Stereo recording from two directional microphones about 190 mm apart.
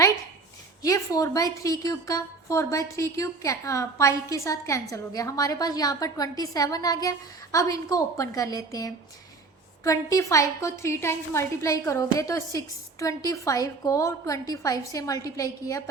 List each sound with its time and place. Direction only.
0.8 s a woman's voice: 20° left (ahead or behind)